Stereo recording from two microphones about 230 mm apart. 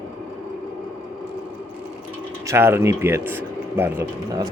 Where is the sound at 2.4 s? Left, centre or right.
Centre.